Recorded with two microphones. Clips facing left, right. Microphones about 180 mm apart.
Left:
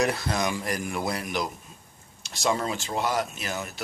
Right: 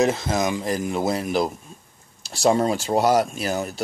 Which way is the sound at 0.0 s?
20° right (ahead or behind).